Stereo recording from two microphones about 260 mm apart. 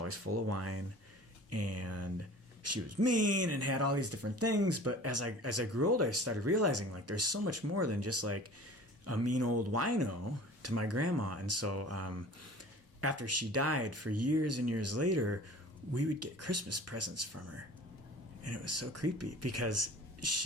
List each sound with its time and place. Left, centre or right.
0.0 s speech: right
18.4 s speech: right